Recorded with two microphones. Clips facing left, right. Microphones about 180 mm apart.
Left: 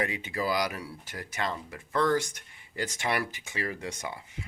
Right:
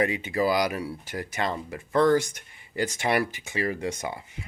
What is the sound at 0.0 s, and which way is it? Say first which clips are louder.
Speech: right 6 dB; 15° right (ahead or behind).